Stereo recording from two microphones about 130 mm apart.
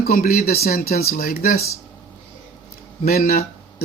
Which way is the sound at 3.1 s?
90° left.